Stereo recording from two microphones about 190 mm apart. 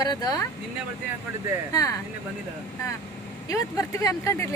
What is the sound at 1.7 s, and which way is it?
Speech, 20° left (ahead or behind).